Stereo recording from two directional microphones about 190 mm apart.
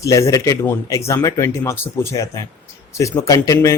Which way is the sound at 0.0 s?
15° left (ahead or behind).